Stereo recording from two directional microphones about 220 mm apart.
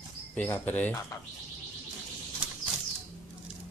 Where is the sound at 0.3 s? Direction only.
5° left (ahead or behind).